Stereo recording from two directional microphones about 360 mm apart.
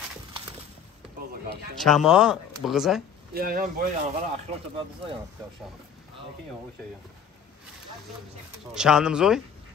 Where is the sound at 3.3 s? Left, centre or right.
Right.